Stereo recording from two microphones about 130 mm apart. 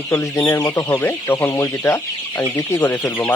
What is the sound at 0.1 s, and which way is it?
Speech, 20° left (ahead or behind).